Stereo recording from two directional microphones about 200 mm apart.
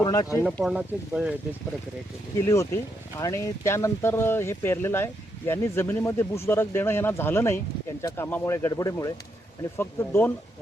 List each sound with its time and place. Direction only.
0.0 s speech: 20° left (ahead or behind)
0.5 s speech: centre (ahead or behind)
2.4 s speech: 15° left (ahead or behind)